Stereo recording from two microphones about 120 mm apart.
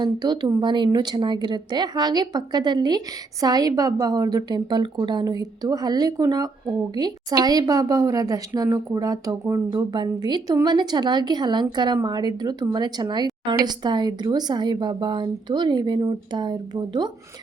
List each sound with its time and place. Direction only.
0.0 s a woman's voice: 35° right (ahead or behind)